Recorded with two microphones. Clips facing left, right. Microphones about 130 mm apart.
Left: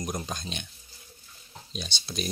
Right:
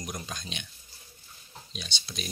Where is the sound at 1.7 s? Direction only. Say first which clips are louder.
Left 5 dB; 40° left (ahead or behind).